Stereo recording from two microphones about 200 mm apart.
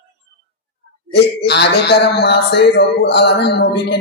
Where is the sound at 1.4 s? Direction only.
55° left (ahead or behind).